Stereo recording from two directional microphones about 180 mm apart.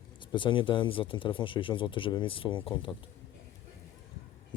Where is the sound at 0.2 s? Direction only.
25° left (ahead or behind).